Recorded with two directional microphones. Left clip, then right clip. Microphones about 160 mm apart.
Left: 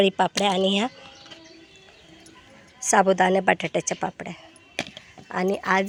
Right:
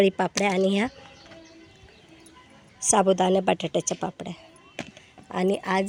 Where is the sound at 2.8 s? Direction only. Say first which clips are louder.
Left 2 dB; 20° right (ahead or behind).